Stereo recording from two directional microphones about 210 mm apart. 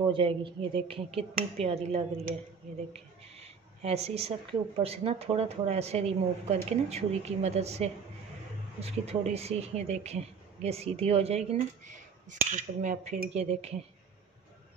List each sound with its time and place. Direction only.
0.1 s speech: 25° right (ahead or behind)